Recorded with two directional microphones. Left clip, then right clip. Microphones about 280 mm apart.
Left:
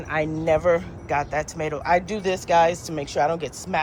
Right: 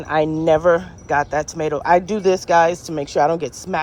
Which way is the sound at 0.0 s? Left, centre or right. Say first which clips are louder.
Right 7 dB; centre.